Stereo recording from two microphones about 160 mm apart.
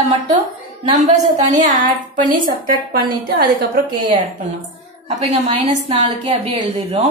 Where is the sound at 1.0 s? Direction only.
45° right (ahead or behind).